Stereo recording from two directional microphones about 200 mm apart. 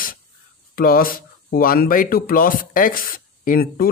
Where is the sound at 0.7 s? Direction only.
45° left (ahead or behind).